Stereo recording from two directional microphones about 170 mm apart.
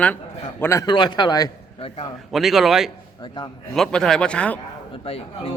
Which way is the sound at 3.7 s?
5° left (ahead or behind).